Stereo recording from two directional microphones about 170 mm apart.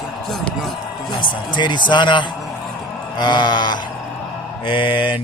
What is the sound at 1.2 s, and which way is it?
Speech, 25° left (ahead or behind).